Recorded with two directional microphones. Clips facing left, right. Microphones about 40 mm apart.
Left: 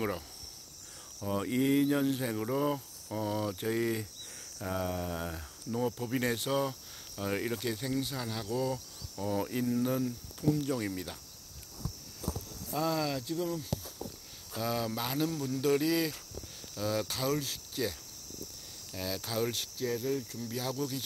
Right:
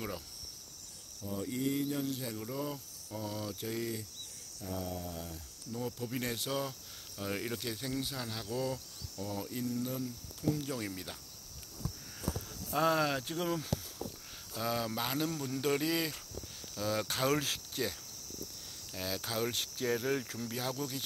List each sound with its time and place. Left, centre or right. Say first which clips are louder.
1.2 s speech: left 6 dB; left
3.2 s a sound: left 6 dB; left
4.6 s speech: left 6 dB; left
5.9 s speech: left 5 dB; centre
9.3 s speech: left 6 dB; left
10.4 s speech: left 4 dB; centre
12.7 s speech: right 2 dB; right
13.3 s speech: left 1 dB; right
14.6 s speech: left 1 dB; centre
17.3 s speech: right 1 dB; right
17.8 s cricket: left 3 dB; centre
18.9 s cricket: left 2 dB; centre
19.8 s speech: right 1 dB; right
20.4 s cricket: left 2 dB; centre